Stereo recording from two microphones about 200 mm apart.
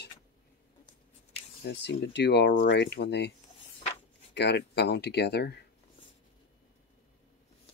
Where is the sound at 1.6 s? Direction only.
60° left (ahead or behind).